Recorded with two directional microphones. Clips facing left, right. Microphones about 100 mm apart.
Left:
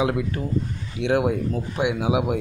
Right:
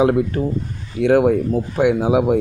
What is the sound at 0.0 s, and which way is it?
A man's voice, 35° right (ahead or behind).